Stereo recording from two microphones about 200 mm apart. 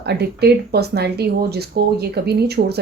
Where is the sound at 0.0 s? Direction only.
55° right (ahead or behind).